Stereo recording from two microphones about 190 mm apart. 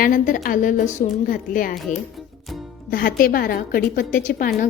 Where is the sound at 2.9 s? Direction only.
50° left (ahead or behind).